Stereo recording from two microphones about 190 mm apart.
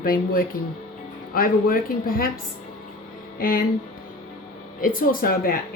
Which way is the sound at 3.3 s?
50° left (ahead or behind).